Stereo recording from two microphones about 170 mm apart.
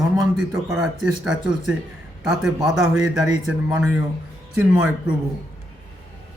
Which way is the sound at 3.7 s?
5° right (ahead or behind).